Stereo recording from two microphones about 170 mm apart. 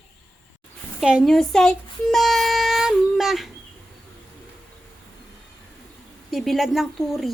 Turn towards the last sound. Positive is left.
turn(degrees=0)  # may be behind; listen again after turning